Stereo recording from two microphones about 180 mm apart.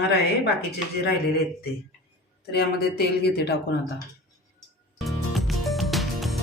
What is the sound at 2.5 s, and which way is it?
Speech, 65° left (ahead or behind).